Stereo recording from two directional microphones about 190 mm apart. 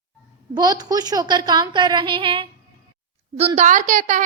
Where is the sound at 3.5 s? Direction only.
40° right (ahead or behind).